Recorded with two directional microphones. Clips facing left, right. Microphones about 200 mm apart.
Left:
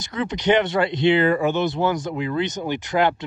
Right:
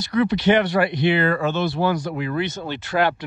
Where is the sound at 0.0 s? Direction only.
20° left (ahead or behind).